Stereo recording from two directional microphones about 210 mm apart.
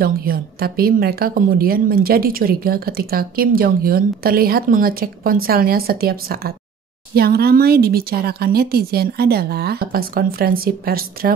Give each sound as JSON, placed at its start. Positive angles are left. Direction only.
{"t": 0.0, "sound": "a woman's voice", "side_deg": -45}